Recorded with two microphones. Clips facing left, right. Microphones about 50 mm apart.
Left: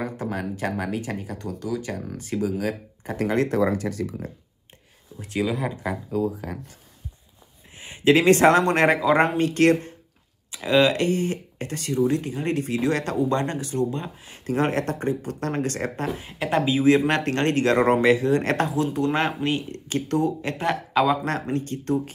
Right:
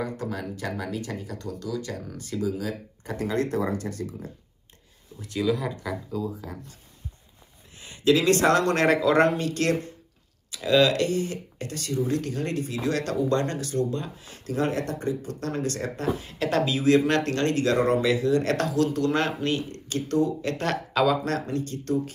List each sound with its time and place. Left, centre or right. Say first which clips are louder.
0.0 s speech: left 2 dB; left
2.4 s speech: left 2 dB; left
3.8 s speech: left 5 dB; left
5.1 s a man's voice: even; left
6.1 s speech: left 6 dB; left
7.7 s a man's voice: left 3 dB; left
9.5 s a man's voice: left 6 dB; left
12.3 s speech: left 3 dB; centre
12.5 s speech: left 4 dB; left
16.3 s a man's voice: left 4 dB; left
20.6 s speech: left 3 dB; centre
21.2 s speech: left 2 dB; left